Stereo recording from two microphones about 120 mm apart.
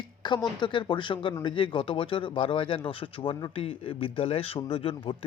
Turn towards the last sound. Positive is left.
turn(degrees=45)  # may be behind; listen again after turning